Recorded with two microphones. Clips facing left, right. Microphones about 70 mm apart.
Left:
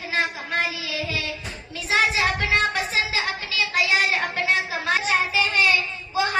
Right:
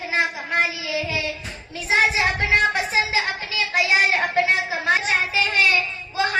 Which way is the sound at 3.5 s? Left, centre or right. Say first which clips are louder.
Right 2 dB; right.